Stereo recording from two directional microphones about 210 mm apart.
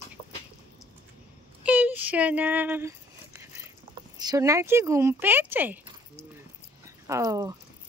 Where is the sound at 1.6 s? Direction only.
5° right (ahead or behind).